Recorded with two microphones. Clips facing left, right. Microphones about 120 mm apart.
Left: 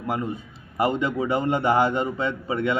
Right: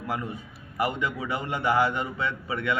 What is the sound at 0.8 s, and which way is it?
A man's voice, 25° left (ahead or behind).